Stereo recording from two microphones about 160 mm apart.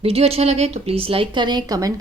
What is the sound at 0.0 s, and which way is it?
Speech, 40° right (ahead or behind).